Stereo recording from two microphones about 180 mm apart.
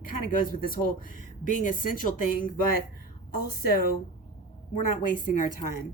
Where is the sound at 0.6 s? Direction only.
50° left (ahead or behind).